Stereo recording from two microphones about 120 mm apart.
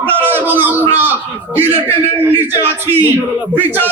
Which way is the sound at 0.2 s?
15° right (ahead or behind).